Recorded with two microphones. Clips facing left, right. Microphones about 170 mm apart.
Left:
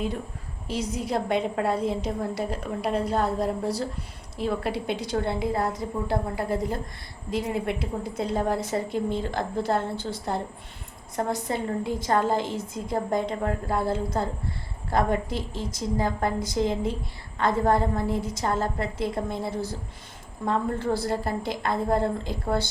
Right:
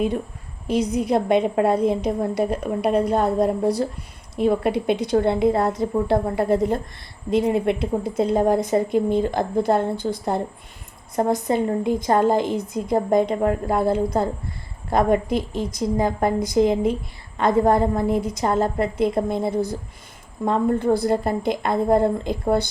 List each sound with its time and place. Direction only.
0.7 s a woman's voice: 15° right (ahead or behind)